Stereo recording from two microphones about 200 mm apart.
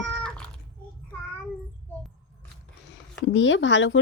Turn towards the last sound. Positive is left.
turn(degrees=65)  # may be behind; listen again after turning